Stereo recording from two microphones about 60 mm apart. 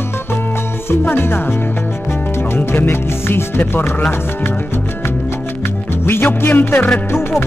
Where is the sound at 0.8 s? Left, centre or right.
Left.